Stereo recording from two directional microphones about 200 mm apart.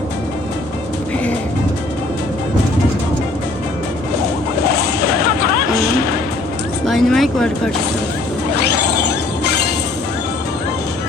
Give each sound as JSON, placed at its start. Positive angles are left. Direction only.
{"t": 6.8, "sound": "vehicle", "side_deg": 0}
{"t": 8.6, "sound": "music", "side_deg": 55}